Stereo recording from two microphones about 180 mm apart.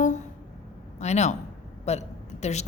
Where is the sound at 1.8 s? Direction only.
35° left (ahead or behind).